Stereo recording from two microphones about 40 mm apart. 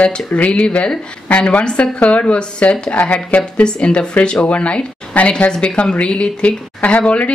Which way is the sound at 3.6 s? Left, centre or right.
Left.